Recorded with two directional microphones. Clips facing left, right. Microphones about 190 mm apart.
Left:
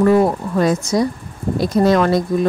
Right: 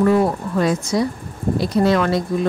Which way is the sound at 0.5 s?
45° left (ahead or behind).